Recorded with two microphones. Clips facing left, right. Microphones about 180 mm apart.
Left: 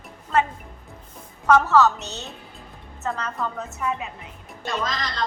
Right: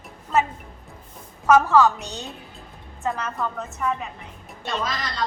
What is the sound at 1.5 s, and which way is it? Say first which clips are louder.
Speech: right 1 dB; 10° right (ahead or behind).